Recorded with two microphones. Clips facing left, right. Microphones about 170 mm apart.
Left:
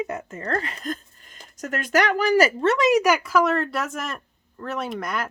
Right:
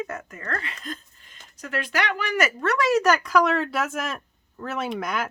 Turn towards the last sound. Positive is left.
turn(degrees=0)  # may be behind; listen again after turning